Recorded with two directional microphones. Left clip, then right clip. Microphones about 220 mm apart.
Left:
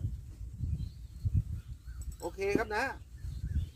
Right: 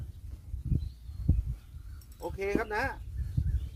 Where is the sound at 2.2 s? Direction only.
5° left (ahead or behind).